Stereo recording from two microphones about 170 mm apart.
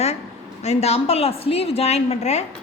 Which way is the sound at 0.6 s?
40° left (ahead or behind).